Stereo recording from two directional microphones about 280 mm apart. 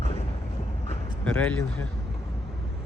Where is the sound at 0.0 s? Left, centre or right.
Left.